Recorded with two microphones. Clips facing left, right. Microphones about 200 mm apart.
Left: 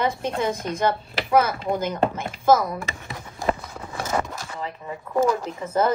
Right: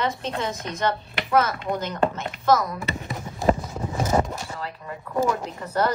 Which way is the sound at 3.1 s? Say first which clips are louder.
Right 4 dB; 20° right (ahead or behind).